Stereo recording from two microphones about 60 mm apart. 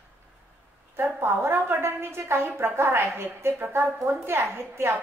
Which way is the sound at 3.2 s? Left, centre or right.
Right.